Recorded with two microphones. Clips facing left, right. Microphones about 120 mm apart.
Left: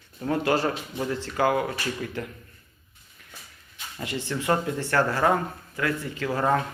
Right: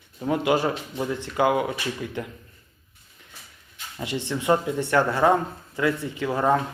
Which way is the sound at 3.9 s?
20° right (ahead or behind).